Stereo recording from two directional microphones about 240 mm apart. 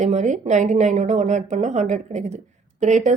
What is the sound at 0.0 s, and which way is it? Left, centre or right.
A woman's voice, right.